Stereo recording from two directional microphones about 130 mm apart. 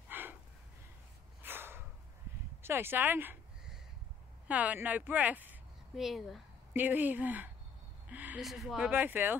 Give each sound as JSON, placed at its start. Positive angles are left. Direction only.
{"t": 0.1, "sound": "gasp", "side_deg": -15}
{"t": 1.4, "sound": "a sound", "side_deg": -15}
{"t": 2.6, "sound": "speech", "side_deg": -15}
{"t": 4.5, "sound": "speech", "side_deg": -10}
{"t": 6.0, "sound": "speech", "side_deg": 0}
{"t": 6.7, "sound": "speech", "side_deg": -15}